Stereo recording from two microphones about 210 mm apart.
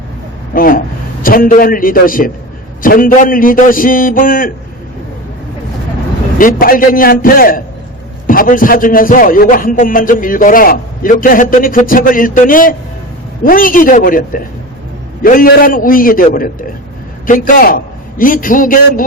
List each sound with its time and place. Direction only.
0.5 s a man's voice: 40° left (ahead or behind)
6.4 s a man's voice: 40° left (ahead or behind)